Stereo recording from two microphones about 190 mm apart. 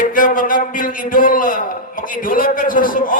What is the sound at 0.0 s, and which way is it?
A man's voice, 45° left (ahead or behind).